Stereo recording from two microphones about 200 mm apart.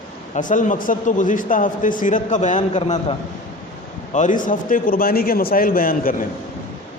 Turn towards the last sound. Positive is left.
turn(degrees=45)  # may be behind; listen again after turning